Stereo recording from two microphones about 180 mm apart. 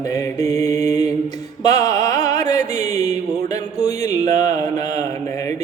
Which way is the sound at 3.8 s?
20° left (ahead or behind).